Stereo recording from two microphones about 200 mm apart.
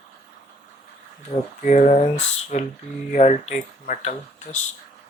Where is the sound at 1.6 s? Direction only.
40° left (ahead or behind).